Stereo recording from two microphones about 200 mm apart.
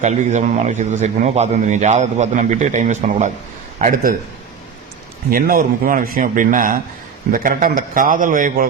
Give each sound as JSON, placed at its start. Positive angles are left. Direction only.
{"t": 0.0, "sound": "a man's voice", "side_deg": -35}
{"t": 5.3, "sound": "speech", "side_deg": -45}